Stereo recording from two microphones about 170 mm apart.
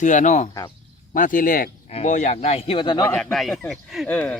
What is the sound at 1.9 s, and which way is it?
Speech, 40° left (ahead or behind).